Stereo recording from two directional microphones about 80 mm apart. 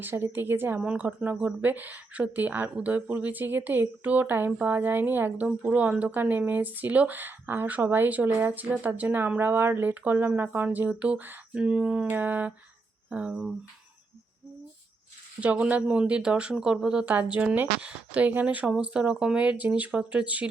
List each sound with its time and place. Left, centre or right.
0.0 s speech: right
15.4 s a woman's voice: centre